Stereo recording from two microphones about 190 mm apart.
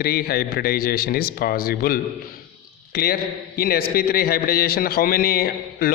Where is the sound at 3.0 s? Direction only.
55° left (ahead or behind).